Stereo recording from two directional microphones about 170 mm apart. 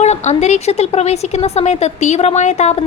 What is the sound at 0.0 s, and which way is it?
A woman's voice, 40° left (ahead or behind).